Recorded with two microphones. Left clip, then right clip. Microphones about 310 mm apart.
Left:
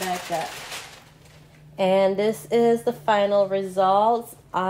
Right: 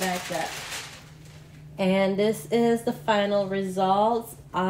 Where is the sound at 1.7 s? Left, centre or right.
Left.